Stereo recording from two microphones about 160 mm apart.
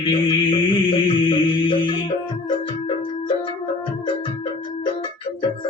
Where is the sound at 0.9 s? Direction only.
30° left (ahead or behind).